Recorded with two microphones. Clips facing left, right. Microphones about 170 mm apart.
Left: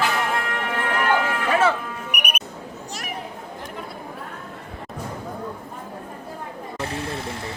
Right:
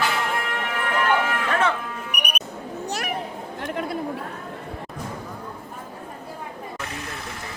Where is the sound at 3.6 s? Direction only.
85° right.